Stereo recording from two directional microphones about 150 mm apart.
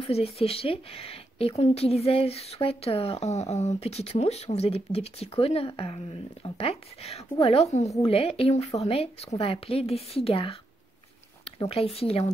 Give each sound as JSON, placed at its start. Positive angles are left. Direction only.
{"t": 0.0, "sound": "speech", "side_deg": 40}
{"t": 12.0, "sound": "speech", "side_deg": 40}